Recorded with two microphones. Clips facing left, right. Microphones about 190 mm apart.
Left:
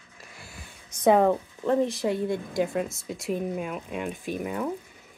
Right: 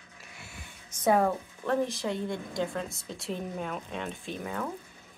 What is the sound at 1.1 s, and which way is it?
Speech, 20° left (ahead or behind).